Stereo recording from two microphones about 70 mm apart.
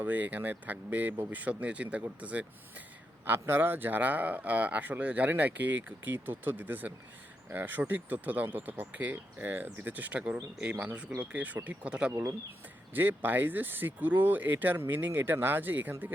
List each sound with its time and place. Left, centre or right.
0.0 s speech: right
3.2 s speech: right; by 12.1 s centre
12.9 s speech: right